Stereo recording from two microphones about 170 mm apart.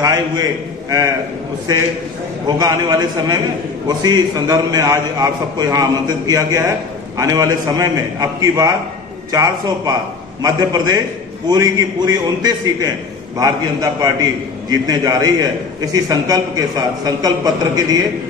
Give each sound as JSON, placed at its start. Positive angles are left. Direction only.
{"t": 0.0, "sound": "a man's voice", "side_deg": -20}
{"t": 2.4, "sound": "a man's voice", "side_deg": -20}